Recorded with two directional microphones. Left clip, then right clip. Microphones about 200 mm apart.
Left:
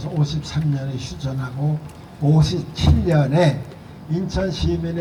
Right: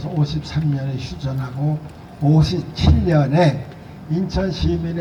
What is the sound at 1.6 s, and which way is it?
A man's voice, 15° left (ahead or behind).